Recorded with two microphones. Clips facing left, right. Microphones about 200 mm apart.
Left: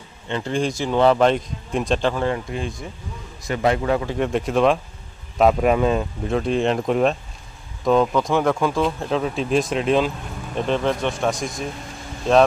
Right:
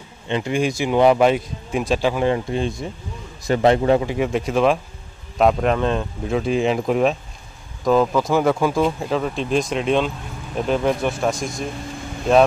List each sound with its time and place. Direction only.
0.3 s speech: 10° right (ahead or behind)
2.2 s a man's voice: 25° right (ahead or behind)
4.1 s speech: 5° right (ahead or behind)